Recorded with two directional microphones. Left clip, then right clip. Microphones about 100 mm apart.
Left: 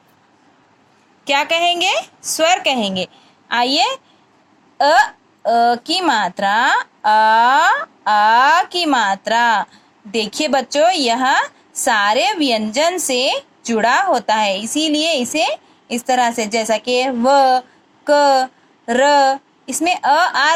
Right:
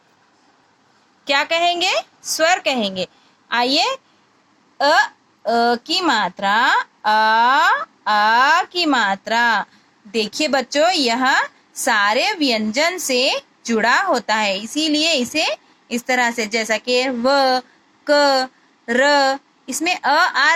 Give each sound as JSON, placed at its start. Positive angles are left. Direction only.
{"t": 1.2, "sound": "speech", "side_deg": 30}